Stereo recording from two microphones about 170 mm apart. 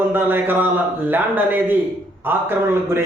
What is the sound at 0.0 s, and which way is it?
A man's voice, 10° right (ahead or behind).